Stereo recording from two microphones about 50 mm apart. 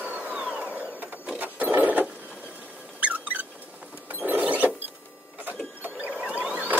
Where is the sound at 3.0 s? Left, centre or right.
Right.